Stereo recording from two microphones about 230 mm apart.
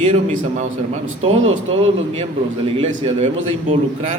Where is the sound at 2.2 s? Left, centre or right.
Right.